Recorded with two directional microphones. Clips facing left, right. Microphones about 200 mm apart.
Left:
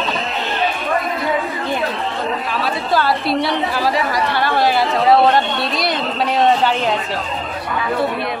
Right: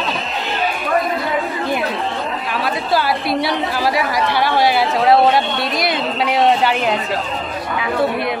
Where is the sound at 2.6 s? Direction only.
10° right (ahead or behind).